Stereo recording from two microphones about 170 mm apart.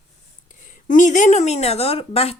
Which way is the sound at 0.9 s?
45° left (ahead or behind).